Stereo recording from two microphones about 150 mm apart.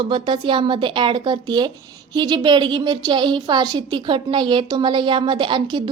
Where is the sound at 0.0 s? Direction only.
30° right (ahead or behind).